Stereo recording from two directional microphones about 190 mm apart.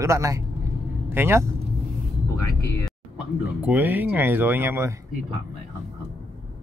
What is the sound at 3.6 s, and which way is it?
Speech, 10° right (ahead or behind).